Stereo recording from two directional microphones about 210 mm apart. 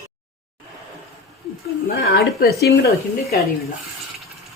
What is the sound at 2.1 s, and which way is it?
Speech, 50° left (ahead or behind).